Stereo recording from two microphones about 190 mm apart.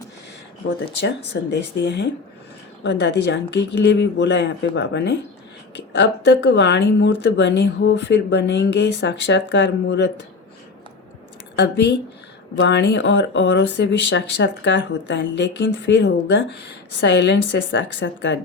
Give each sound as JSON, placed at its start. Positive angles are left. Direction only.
{"t": 1.0, "sound": "speech", "side_deg": 70}
{"t": 11.5, "sound": "speech", "side_deg": 65}